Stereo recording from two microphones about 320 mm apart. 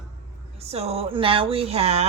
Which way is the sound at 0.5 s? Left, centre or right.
Centre.